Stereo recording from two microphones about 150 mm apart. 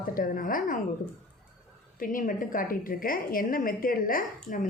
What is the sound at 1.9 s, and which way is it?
A woman's voice, 65° left (ahead or behind).